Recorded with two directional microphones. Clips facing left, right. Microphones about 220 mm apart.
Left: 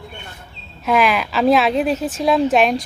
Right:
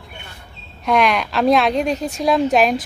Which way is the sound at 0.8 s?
5° left (ahead or behind).